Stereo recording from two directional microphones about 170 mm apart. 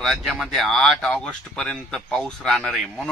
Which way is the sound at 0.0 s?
Centre (ahead or behind).